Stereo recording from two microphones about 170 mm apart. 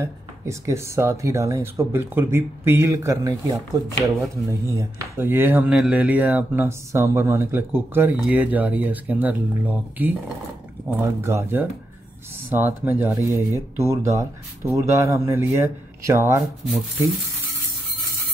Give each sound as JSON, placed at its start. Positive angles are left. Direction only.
{"t": 0.0, "sound": "speech", "side_deg": -15}
{"t": 3.8, "sound": "chopping", "side_deg": -20}
{"t": 4.5, "sound": "speech", "side_deg": -15}
{"t": 16.6, "sound": "speech", "side_deg": 0}